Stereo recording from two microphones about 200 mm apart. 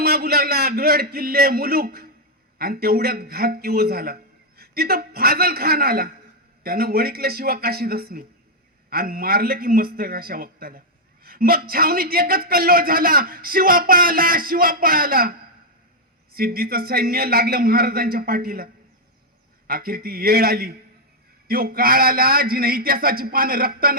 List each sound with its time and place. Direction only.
0.0 s a man's voice: 50° right (ahead or behind)